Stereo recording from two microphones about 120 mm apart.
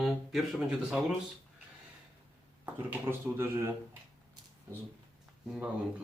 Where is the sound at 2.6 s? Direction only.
20° right (ahead or behind).